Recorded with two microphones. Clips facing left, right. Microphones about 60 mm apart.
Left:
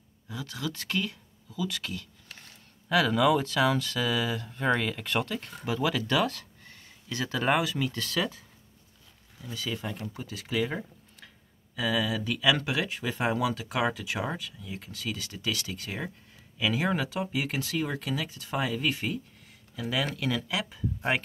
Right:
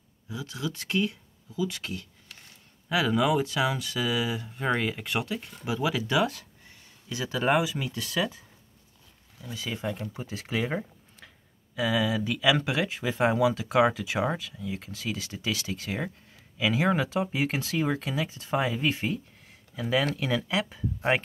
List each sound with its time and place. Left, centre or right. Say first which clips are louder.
0.3 s speech: right 1 dB; centre
9.5 s speech: right 2 dB; right